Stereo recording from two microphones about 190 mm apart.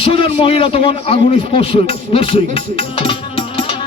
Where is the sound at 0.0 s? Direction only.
30° left (ahead or behind).